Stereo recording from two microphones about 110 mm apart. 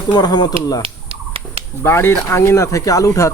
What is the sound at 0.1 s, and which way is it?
Speech, 40° left (ahead or behind).